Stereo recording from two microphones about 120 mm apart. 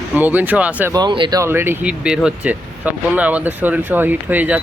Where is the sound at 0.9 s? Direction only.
40° right (ahead or behind).